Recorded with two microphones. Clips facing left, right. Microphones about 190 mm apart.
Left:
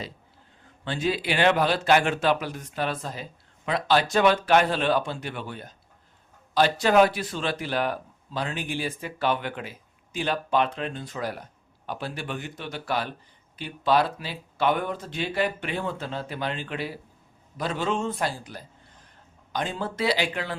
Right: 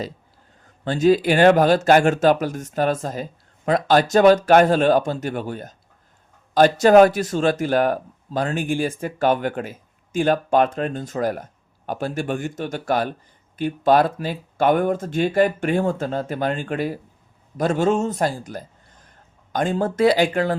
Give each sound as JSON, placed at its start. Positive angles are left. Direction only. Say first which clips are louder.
{"t": 0.9, "sound": "speech", "louder": "right 10 dB", "side_deg": -45}